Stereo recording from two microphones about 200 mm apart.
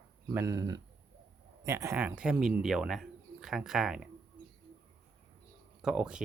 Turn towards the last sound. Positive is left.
turn(degrees=-5)  # may be behind; listen again after turning